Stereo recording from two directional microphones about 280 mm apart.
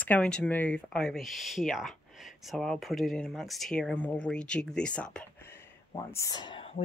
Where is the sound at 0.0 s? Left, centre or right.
Centre.